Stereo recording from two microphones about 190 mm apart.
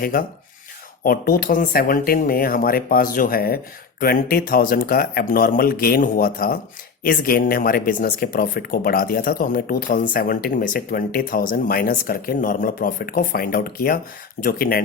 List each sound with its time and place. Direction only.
0.0 s speech: 50° left (ahead or behind)